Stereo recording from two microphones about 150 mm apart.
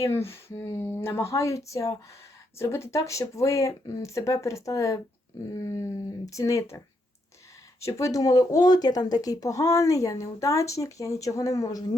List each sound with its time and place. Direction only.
0.0 s speech: 15° left (ahead or behind)
7.8 s speech: 20° left (ahead or behind)